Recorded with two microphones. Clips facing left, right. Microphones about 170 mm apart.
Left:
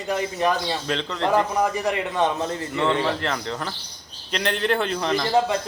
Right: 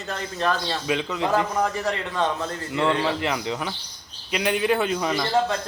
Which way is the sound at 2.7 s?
15° right (ahead or behind).